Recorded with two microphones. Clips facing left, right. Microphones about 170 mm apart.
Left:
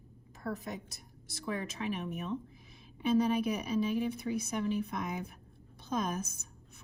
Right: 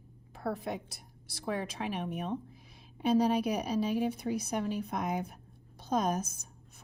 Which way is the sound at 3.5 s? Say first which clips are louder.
Right 1 dB; 50° right (ahead or behind).